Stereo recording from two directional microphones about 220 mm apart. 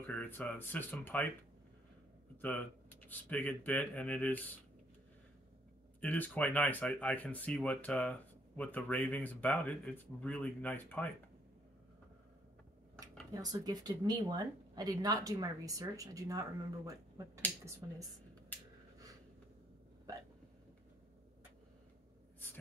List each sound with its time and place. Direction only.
0.0 s speech: 10° left (ahead or behind)
2.4 s speech: 5° left (ahead or behind)
5.9 s speech: 5° left (ahead or behind)
13.3 s speech: 15° right (ahead or behind)